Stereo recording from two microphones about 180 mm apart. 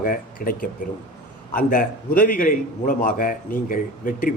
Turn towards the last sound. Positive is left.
turn(degrees=50)  # may be behind; listen again after turning